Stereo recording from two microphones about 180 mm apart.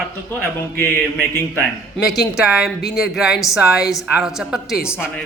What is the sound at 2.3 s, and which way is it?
A man's voice, 5° right (ahead or behind).